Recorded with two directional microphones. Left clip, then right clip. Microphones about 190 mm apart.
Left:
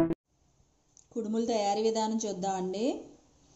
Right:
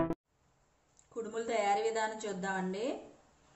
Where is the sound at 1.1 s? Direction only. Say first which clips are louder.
Left 5 dB; 10° left (ahead or behind).